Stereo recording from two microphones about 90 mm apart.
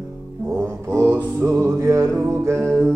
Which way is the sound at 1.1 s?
20° right (ahead or behind).